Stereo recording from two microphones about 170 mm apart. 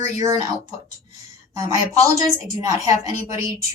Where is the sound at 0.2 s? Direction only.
20° right (ahead or behind).